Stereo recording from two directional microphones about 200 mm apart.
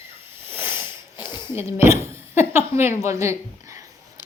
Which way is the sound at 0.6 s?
10° right (ahead or behind).